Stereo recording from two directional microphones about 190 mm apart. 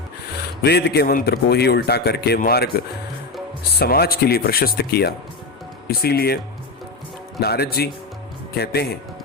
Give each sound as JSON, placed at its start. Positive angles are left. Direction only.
{"t": 0.6, "sound": "a man's voice", "side_deg": 60}